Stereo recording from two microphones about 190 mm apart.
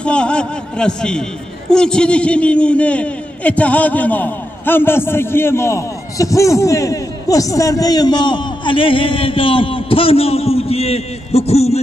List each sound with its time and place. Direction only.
0.0 s a man's voice: 5° left (ahead or behind); by 11.8 s 35° left (ahead or behind)